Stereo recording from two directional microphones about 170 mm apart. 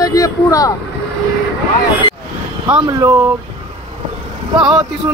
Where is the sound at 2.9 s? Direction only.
20° right (ahead or behind).